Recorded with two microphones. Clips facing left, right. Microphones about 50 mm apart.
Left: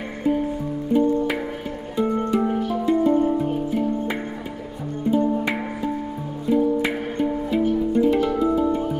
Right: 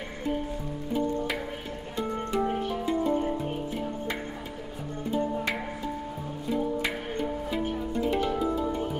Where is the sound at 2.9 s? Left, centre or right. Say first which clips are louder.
Left 8 dB; centre.